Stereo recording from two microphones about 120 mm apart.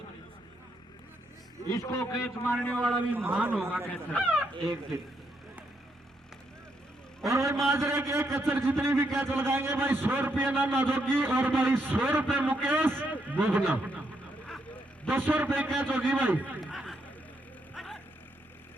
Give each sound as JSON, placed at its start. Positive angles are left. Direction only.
{"t": 1.7, "sound": "a man's voice", "side_deg": 25}
{"t": 2.6, "sound": "speech", "side_deg": 10}
{"t": 3.1, "sound": "a man's voice", "side_deg": -15}
{"t": 3.8, "sound": "speech", "side_deg": 10}
{"t": 7.3, "sound": "a sound", "side_deg": -20}
{"t": 7.7, "sound": "a man's voice", "side_deg": -20}
{"t": 15.1, "sound": "a man's voice", "side_deg": -15}
{"t": 16.7, "sound": "vehicle", "side_deg": 0}